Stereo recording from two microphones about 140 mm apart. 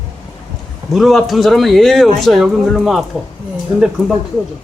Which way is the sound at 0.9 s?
Centre (ahead or behind).